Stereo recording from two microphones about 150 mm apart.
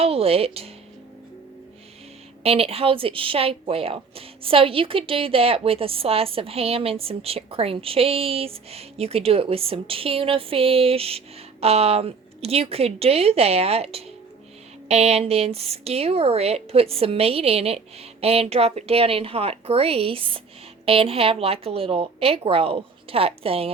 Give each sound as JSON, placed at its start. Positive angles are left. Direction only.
{"t": 0.0, "sound": "a woman's voice", "side_deg": -40}
{"t": 2.4, "sound": "a woman's voice", "side_deg": -40}